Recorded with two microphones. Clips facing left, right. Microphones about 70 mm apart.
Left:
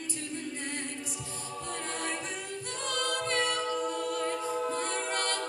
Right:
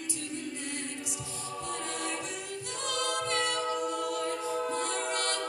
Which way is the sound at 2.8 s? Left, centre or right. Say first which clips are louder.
Even; left.